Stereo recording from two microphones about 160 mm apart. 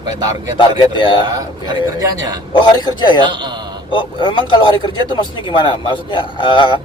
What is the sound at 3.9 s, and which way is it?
A man's voice, 30° left (ahead or behind).